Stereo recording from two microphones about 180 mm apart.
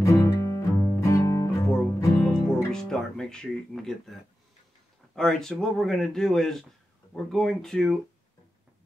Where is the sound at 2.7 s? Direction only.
5° left (ahead or behind).